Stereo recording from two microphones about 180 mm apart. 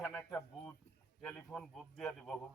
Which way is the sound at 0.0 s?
5° left (ahead or behind).